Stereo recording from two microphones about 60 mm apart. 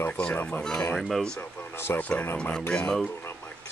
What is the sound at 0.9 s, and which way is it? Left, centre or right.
Speech, centre.